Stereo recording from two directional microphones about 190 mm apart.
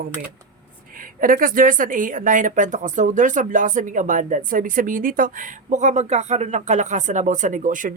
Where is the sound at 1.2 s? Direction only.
45° right (ahead or behind).